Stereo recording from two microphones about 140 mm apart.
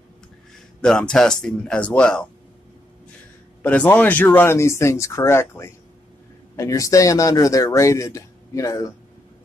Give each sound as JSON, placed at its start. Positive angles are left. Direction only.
{"t": 0.7, "sound": "speech", "side_deg": 5}
{"t": 3.6, "sound": "speech", "side_deg": 10}